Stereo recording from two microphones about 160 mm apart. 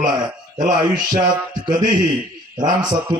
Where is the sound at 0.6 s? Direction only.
60° right (ahead or behind).